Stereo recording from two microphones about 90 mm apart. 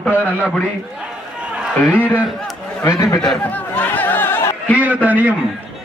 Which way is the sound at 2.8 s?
35° left (ahead or behind).